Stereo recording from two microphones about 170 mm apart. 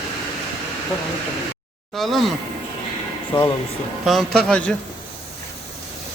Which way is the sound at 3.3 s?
25° left (ahead or behind).